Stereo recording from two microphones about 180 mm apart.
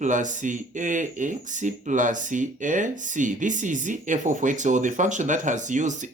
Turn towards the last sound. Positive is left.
turn(degrees=-45)  # may be behind; listen again after turning